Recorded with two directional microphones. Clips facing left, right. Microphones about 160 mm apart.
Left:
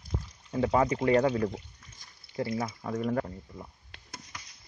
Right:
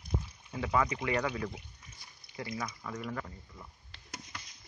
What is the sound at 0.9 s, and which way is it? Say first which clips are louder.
Speech: left 9 dB; 45° left (ahead or behind).